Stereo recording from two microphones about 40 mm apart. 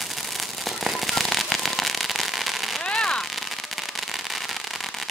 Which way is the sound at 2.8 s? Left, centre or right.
Left.